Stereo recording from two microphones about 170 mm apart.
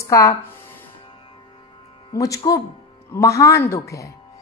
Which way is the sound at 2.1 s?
20° left (ahead or behind).